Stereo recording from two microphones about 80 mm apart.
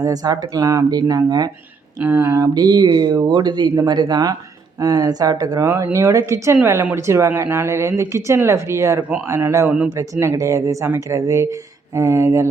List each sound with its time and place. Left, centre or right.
0.0 s speech: right
0.9 s speech: right
2.0 s speech: right
2.6 s speech: right
5.6 s speech: right
9.0 s speech: centre
9.2 s speech: right
9.6 s speech: centre
9.9 s speech: right